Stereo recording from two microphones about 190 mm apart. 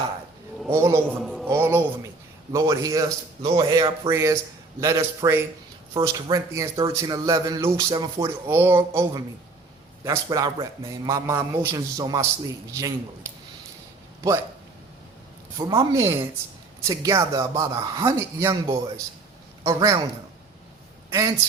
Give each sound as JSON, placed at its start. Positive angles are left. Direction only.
{"t": 0.7, "sound": "a man's voice", "side_deg": -15}
{"t": 1.2, "sound": "a sound", "side_deg": 0}
{"t": 1.5, "sound": "music", "side_deg": -15}
{"t": 2.5, "sound": "speech", "side_deg": -15}
{"t": 3.4, "sound": "a man's voice", "side_deg": -30}
{"t": 8.4, "sound": "speech", "side_deg": -10}
{"t": 15.5, "sound": "speech", "side_deg": -20}
{"t": 21.1, "sound": "speech", "side_deg": -15}